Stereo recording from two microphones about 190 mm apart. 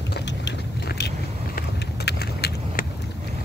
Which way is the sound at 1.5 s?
55° left (ahead or behind).